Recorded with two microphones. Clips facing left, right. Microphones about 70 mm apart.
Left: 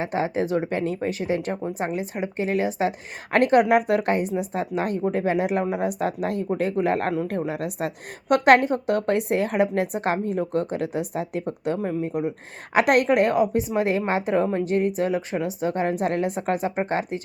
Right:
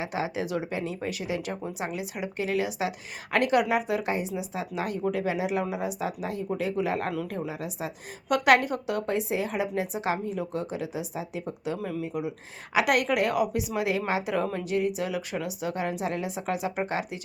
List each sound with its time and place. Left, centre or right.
0.0 s a woman's voice: left
8.4 s a woman's voice: left
8.9 s a woman's voice: left
11.8 s a woman's voice: left